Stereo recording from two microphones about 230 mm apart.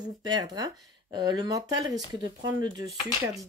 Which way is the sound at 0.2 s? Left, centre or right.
Centre.